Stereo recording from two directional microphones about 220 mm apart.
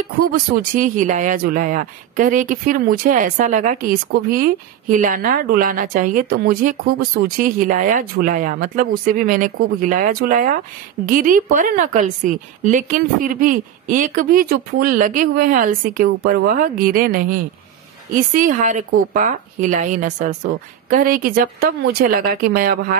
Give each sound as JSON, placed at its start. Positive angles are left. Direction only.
{"t": 0.2, "sound": "speech", "side_deg": -40}